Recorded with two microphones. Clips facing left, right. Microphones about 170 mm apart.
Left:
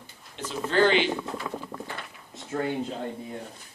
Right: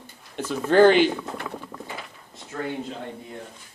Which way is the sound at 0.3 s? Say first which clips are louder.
Right 7 dB; 50° right (ahead or behind).